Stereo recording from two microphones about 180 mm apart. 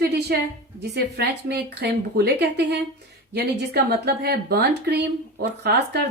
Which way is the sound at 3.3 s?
60° right (ahead or behind).